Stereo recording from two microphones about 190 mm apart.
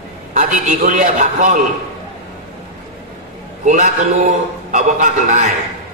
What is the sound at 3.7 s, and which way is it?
A man's voice, 40° right (ahead or behind).